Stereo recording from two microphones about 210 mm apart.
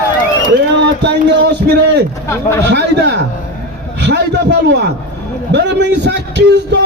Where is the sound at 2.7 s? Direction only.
55° right (ahead or behind).